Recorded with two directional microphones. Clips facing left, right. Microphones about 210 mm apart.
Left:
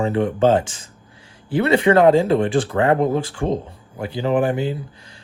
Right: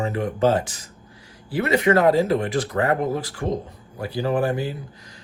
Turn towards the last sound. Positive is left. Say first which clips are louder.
# left 3 dB
turn(degrees=20)  # may be behind; listen again after turning